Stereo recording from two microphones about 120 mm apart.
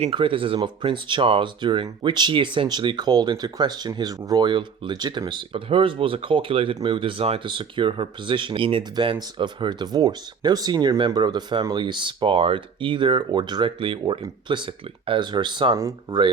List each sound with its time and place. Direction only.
0.1 s speech: 45° right (ahead or behind)
14.0 s speech: 35° right (ahead or behind)